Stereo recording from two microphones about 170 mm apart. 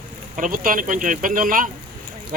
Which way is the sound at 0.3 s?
50° right (ahead or behind).